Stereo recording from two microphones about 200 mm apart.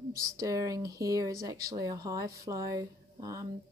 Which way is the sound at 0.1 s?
15° right (ahead or behind).